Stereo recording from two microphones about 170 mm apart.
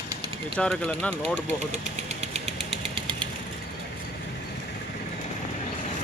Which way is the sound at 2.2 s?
40° right (ahead or behind).